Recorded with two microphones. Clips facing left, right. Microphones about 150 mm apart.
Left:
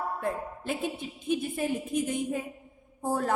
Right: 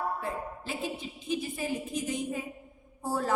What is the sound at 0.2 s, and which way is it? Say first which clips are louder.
A woman's voice: left 3 dB; 55° left (ahead or behind).